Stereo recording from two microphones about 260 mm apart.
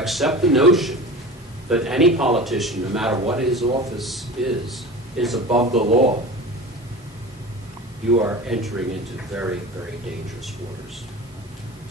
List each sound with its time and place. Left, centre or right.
0.0 s a man's voice: centre
5.5 s speech: right
8.2 s a man's voice: centre